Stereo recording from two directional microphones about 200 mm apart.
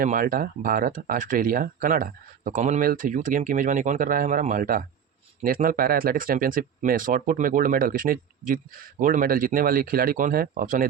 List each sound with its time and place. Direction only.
0.0 s speech: 45° right (ahead or behind)